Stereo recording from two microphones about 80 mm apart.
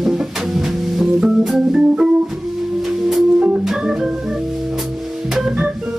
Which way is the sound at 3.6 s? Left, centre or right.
Centre.